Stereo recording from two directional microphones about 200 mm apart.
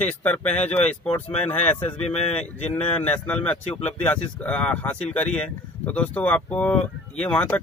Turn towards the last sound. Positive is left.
turn(degrees=5)  # may be behind; listen again after turning